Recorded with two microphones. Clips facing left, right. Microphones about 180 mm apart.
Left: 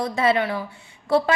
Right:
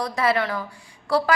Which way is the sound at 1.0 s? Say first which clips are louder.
Left 2 dB; 20° left (ahead or behind).